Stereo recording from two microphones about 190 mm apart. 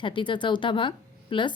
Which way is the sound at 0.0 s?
25° left (ahead or behind).